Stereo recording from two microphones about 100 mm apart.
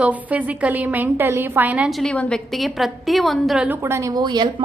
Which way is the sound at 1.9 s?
5° left (ahead or behind).